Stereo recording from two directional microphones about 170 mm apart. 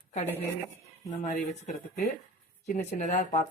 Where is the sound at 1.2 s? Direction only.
45° left (ahead or behind).